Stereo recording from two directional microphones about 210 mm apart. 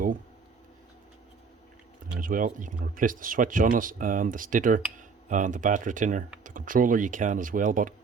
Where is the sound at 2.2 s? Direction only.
40° right (ahead or behind).